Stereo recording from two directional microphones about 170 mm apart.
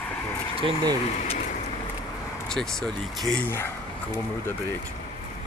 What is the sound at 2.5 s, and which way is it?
Speech, 5° left (ahead or behind).